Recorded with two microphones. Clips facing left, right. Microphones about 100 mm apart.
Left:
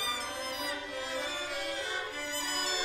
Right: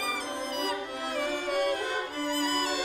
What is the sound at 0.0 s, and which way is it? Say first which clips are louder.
Music: right 4 dB; 55° right (ahead or behind).